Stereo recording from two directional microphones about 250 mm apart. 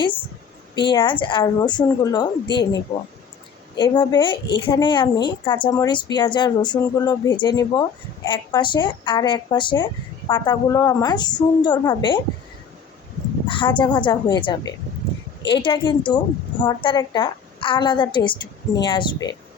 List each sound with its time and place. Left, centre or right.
0.8 s a woman's voice: centre
3.8 s a woman's voice: centre
13.5 s a woman's voice: centre